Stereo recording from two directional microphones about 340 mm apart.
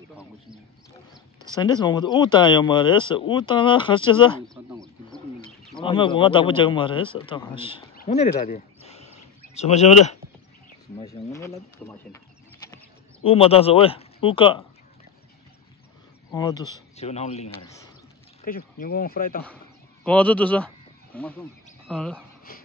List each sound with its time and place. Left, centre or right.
1.6 s speech: centre
5.8 s speech: centre
7.9 s a sound: left
11.0 s speech: centre
12.6 s speech: centre
16.3 s speech: centre
19.4 s goat: centre
21.8 s speech: centre
22.5 s beatboxing: left